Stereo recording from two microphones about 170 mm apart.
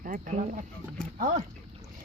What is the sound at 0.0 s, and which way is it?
Speech, 55° right (ahead or behind).